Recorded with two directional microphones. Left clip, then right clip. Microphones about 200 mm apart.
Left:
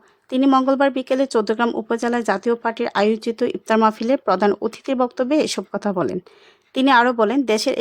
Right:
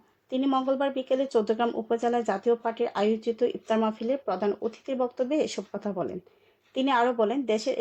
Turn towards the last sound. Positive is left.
turn(degrees=45)  # may be behind; listen again after turning